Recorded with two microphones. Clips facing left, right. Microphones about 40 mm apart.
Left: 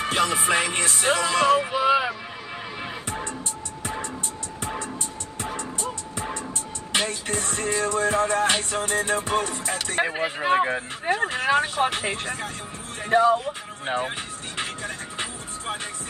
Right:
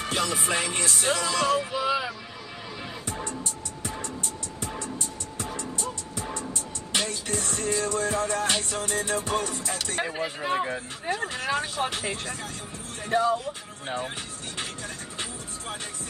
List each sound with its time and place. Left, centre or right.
0.0 s music: left
3.1 s music: left
11.1 s speech: left
14.6 s vehicle: left